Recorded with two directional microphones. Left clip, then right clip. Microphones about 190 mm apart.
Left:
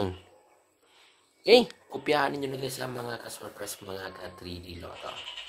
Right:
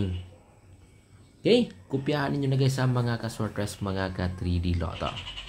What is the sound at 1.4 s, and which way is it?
Speech, 45° left (ahead or behind).